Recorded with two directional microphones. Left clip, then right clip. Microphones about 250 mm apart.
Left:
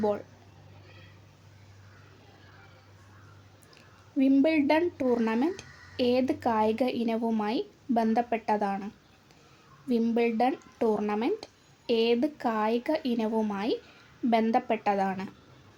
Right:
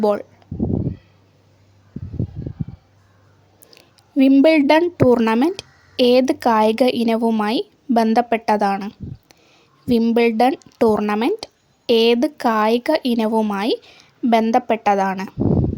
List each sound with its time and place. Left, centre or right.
0.0 s speech: right
3.7 s speech: right
9.9 s speech: right